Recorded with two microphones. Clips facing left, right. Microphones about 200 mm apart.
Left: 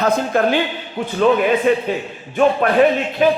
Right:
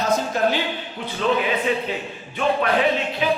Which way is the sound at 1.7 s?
50° left (ahead or behind).